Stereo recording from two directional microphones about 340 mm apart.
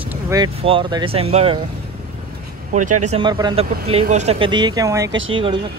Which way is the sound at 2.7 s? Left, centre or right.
Right.